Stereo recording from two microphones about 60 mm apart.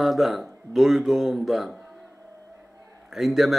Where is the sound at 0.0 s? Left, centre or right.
Centre.